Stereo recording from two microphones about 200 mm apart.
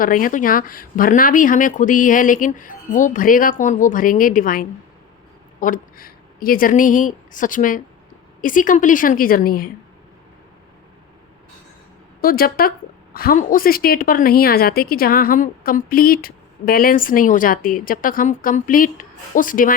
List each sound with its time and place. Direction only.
0.0 s a woman's voice: 45° left (ahead or behind)
12.2 s a woman's voice: 45° left (ahead or behind)